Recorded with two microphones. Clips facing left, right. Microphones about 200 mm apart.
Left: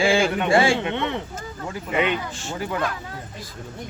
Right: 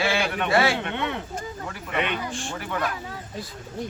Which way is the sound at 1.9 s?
20° left (ahead or behind).